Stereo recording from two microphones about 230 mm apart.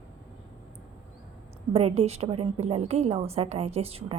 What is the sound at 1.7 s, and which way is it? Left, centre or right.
A woman's voice, right.